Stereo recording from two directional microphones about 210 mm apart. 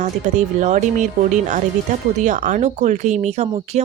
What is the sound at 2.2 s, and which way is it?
Speech, 35° right (ahead or behind).